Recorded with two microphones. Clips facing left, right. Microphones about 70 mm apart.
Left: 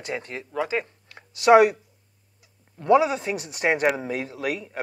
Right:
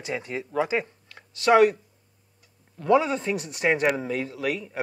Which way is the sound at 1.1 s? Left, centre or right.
Centre.